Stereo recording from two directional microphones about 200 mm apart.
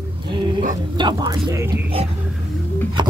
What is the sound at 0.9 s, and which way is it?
Speech, 20° right (ahead or behind).